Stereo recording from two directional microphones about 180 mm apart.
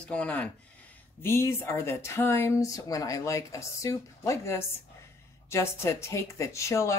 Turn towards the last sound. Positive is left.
turn(degrees=15)  # may be behind; listen again after turning